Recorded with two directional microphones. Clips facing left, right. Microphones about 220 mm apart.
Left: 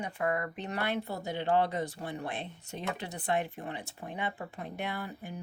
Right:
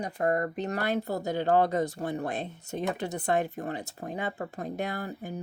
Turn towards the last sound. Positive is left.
turn(degrees=-40)  # may be behind; listen again after turning